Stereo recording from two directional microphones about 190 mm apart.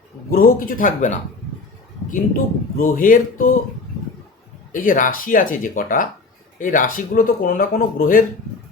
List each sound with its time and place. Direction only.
0.3 s speech: 50° left (ahead or behind)
4.7 s speech: 45° left (ahead or behind)